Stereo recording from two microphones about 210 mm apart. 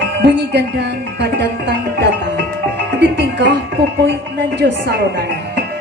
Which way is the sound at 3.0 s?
55° right (ahead or behind).